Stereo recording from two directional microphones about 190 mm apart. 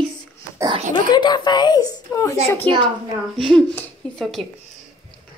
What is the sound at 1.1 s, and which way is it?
A woman's voice, 25° left (ahead or behind).